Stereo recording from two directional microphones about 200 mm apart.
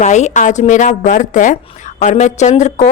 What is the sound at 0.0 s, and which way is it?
A woman's voice, 35° left (ahead or behind).